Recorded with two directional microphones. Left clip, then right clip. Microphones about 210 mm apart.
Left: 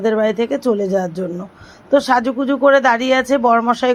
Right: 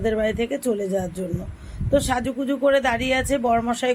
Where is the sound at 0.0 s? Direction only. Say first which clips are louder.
Left 6 dB; 10° left (ahead or behind).